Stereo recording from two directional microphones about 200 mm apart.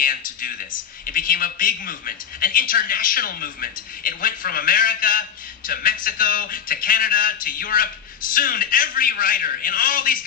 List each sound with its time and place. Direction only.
0.0 s a man's voice: 45° left (ahead or behind)